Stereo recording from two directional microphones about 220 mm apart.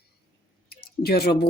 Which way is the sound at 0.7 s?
45° left (ahead or behind).